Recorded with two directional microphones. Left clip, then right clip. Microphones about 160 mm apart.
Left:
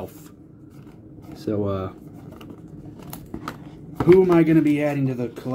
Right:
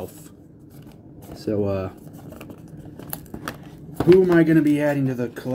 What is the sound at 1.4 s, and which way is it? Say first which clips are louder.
Speech: right 2 dB; 5° right (ahead or behind).